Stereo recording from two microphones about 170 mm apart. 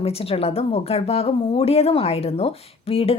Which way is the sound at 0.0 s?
35° left (ahead or behind).